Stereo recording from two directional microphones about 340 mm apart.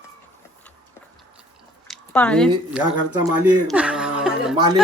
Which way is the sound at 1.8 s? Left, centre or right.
Centre.